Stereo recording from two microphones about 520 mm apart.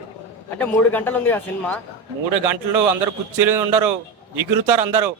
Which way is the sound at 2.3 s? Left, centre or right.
Right.